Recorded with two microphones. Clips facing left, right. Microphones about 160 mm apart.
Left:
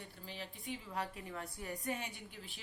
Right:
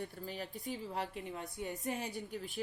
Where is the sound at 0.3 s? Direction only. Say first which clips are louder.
Left 1 dB; 45° right (ahead or behind).